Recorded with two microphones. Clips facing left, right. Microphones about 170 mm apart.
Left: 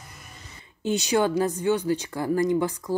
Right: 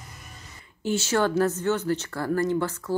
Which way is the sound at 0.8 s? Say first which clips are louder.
Left 1 dB; 15° left (ahead or behind).